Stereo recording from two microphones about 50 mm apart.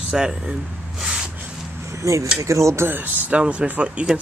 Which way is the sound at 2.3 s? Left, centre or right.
Right.